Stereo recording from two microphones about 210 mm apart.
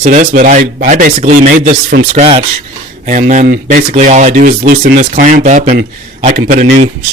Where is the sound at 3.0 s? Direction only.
35° right (ahead or behind).